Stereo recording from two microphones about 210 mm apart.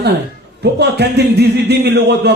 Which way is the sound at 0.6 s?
50° right (ahead or behind).